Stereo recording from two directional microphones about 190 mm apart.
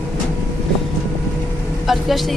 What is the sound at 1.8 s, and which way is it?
Speech, centre (ahead or behind).